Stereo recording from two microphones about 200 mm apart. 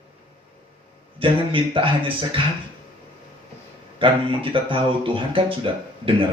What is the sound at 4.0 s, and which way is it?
Speech, 25° right (ahead or behind).